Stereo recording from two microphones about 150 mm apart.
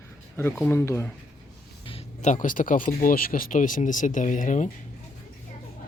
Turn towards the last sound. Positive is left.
turn(degrees=60)  # may be behind; listen again after turning